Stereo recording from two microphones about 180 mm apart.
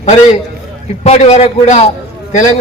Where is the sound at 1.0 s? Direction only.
35° left (ahead or behind).